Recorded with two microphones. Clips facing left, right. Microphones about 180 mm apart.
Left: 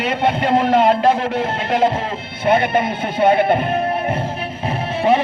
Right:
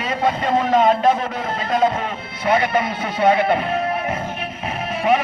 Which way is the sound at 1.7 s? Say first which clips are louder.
Left 1 dB; 30° left (ahead or behind).